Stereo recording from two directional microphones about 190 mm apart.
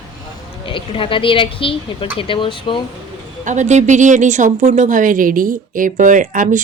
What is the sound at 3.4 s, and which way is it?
Speech, 40° right (ahead or behind).